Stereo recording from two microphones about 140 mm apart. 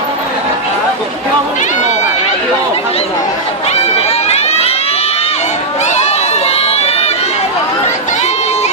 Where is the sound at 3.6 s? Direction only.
50° left (ahead or behind).